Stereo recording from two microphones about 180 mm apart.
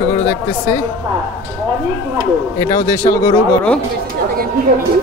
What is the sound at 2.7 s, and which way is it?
Speech, 20° left (ahead or behind).